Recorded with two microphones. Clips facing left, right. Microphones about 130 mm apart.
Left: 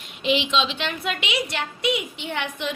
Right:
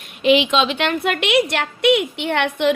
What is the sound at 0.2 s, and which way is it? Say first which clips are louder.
A woman's voice: right 7 dB; 60° right (ahead or behind).